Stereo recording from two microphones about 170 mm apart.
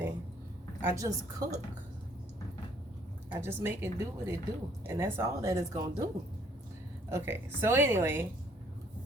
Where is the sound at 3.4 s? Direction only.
15° right (ahead or behind).